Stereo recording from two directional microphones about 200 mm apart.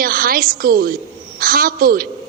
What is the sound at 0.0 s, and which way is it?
A woman's voice, 45° right (ahead or behind).